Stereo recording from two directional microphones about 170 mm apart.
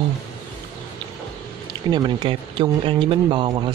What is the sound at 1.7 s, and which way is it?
Speech, 25° right (ahead or behind).